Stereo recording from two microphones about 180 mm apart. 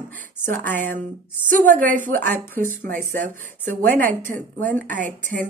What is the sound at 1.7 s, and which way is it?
Speech, 45° right (ahead or behind).